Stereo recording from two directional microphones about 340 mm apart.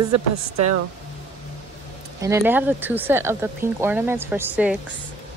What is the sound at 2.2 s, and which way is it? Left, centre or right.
Speech, centre.